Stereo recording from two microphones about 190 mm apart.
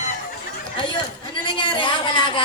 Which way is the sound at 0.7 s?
25° left (ahead or behind).